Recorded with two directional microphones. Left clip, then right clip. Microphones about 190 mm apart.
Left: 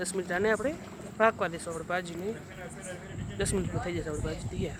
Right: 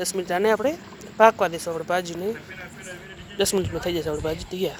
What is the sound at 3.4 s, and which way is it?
Speech, 20° right (ahead or behind).